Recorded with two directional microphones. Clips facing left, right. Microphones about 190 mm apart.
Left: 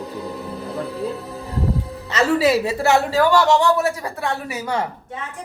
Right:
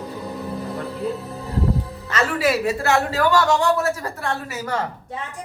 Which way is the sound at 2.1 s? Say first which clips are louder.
Left 4 dB; 25° left (ahead or behind).